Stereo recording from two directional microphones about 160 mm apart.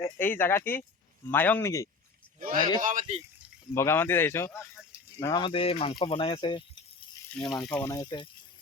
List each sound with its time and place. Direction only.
0.0 s speech: 15° left (ahead or behind)
2.4 s speech: 60° right (ahead or behind)
3.8 s speech: 15° left (ahead or behind)
5.2 s speech: 25° left (ahead or behind)
7.3 s speech: centre (ahead or behind)
7.8 s speech: 15° left (ahead or behind)
8.0 s speech: 30° left (ahead or behind)